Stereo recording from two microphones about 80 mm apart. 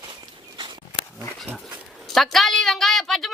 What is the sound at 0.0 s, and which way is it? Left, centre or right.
Walk, right.